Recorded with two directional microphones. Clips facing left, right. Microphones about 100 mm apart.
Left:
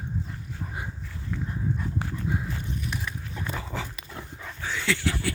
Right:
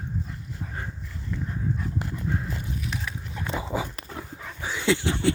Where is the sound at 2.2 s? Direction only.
5° left (ahead or behind).